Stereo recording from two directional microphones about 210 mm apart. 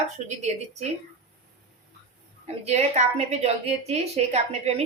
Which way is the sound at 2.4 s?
30° right (ahead or behind).